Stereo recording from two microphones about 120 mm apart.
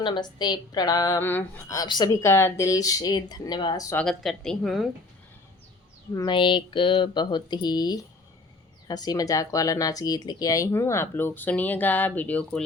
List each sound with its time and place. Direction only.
0.0 s speech: 40° left (ahead or behind)
1.2 s speech: 20° left (ahead or behind); by 2.0 s 35° left (ahead or behind)
2.0 s speech: 20° left (ahead or behind)
3.9 s speech: 5° left (ahead or behind)
6.2 s speech: 40° left (ahead or behind); by 12.6 s 10° left (ahead or behind)